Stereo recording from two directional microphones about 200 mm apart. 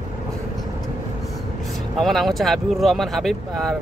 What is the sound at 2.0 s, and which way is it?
Speech, centre (ahead or behind).